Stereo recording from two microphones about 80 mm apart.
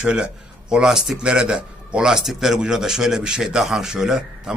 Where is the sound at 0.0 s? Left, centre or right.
Centre.